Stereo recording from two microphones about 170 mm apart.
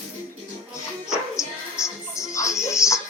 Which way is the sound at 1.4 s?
15° left (ahead or behind).